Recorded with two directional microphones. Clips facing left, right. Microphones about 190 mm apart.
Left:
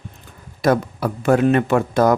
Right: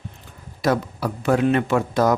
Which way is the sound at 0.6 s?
50° left (ahead or behind).